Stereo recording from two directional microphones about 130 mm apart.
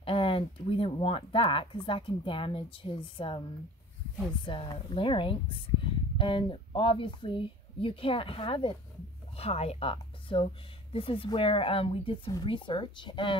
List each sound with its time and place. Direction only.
0.0 s speech: 45° left (ahead or behind)
4.5 s a woman's voice: 40° left (ahead or behind)